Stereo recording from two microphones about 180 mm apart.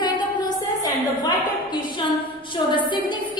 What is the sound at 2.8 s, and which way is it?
Speech, 25° left (ahead or behind).